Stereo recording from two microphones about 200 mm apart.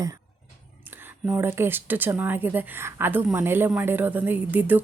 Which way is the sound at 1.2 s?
10° right (ahead or behind).